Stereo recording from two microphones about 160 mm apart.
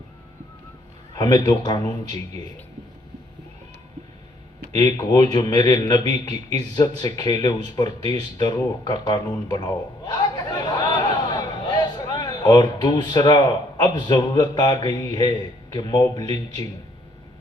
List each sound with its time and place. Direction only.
1.1 s a man's voice: 25° left (ahead or behind)
4.8 s a man's voice: 25° left (ahead or behind)
10.2 s chatter: 25° left (ahead or behind)
11.3 s a man's voice: 25° left (ahead or behind)